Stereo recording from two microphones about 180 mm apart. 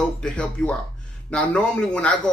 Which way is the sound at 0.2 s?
5° left (ahead or behind).